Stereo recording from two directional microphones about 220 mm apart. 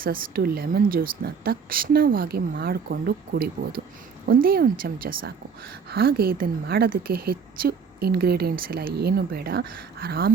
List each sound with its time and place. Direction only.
0.0 s a woman's voice: 40° right (ahead or behind)